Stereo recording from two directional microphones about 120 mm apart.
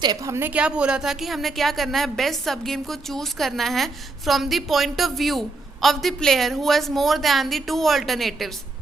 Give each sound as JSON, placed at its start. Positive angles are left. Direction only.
{"t": 0.0, "sound": "a woman's voice", "side_deg": -35}
{"t": 0.3, "sound": "a woman's voice", "side_deg": -15}